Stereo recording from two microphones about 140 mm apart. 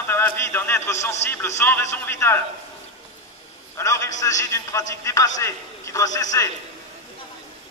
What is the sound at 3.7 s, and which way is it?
A man's voice, 20° left (ahead or behind).